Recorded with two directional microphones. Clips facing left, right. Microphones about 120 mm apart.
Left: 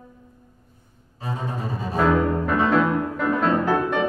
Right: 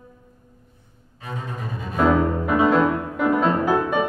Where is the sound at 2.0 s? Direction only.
10° right (ahead or behind).